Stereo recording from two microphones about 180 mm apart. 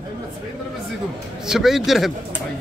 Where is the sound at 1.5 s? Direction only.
Centre (ahead or behind).